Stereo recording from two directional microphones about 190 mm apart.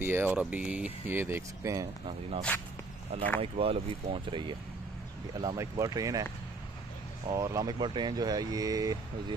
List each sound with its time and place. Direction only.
0.0 s speech: 10° right (ahead or behind)
3.3 s speech: 30° right (ahead or behind)
7.2 s speech: 15° right (ahead or behind)